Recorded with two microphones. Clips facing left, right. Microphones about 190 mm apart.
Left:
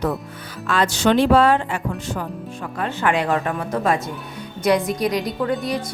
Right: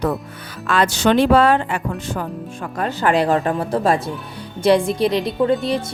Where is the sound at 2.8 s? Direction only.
35° right (ahead or behind).